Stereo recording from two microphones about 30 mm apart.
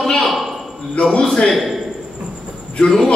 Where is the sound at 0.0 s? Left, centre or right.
Centre.